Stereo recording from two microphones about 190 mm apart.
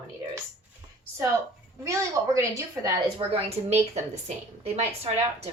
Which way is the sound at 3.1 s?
30° right (ahead or behind).